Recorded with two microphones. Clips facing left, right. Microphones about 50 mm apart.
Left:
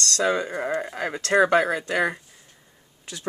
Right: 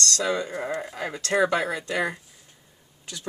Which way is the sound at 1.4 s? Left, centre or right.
Left.